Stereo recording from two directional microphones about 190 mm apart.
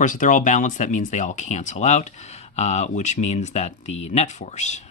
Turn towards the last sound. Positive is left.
turn(degrees=35)  # may be behind; listen again after turning